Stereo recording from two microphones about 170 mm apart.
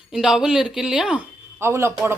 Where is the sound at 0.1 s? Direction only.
5° right (ahead or behind).